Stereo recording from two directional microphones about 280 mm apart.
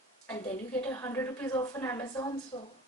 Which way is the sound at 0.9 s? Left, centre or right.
Centre.